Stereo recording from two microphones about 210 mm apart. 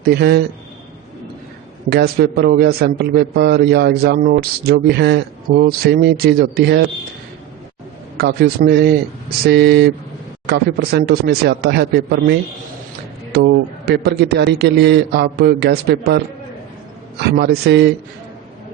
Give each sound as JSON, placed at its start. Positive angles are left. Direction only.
{"t": 0.0, "sound": "a man's voice", "side_deg": -50}
{"t": 1.9, "sound": "a man's voice", "side_deg": -50}
{"t": 8.2, "sound": "a man's voice", "side_deg": -50}
{"t": 17.2, "sound": "a man's voice", "side_deg": -50}